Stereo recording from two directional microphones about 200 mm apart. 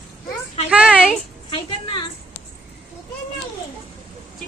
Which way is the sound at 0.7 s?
5° right (ahead or behind).